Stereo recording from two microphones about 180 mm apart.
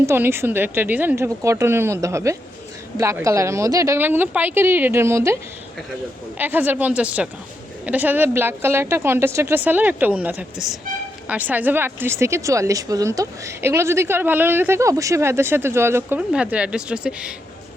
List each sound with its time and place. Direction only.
0.0 s speech: 15° right (ahead or behind)
6.4 s speech: 10° right (ahead or behind)